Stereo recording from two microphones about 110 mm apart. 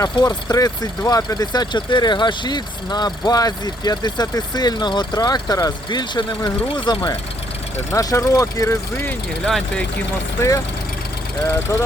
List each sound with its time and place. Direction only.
0.0 s speech: 35° left (ahead or behind)
7.9 s speech: 30° left (ahead or behind)
9.4 s speech: 5° left (ahead or behind)